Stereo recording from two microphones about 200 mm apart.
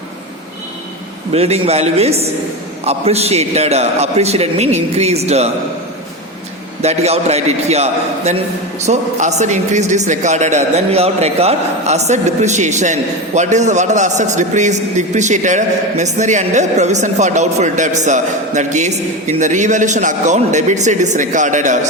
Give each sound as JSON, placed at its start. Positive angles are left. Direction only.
{"t": 1.3, "sound": "a man's voice", "side_deg": -30}
{"t": 6.8, "sound": "a man's voice", "side_deg": -30}